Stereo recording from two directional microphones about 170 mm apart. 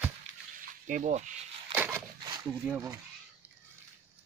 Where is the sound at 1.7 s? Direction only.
10° right (ahead or behind).